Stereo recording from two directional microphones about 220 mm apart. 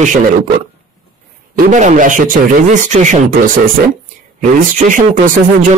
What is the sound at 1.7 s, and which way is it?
Speech, 35° right (ahead or behind).